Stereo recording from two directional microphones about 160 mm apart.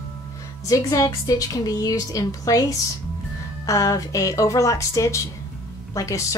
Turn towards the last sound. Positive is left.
turn(degrees=20)  # may be behind; listen again after turning